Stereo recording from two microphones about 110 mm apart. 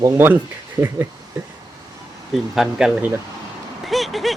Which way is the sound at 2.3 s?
5° right (ahead or behind).